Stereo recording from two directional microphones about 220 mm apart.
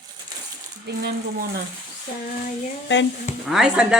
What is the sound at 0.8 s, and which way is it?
Speech, 50° right (ahead or behind).